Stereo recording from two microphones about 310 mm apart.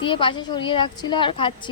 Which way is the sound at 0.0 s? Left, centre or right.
Centre.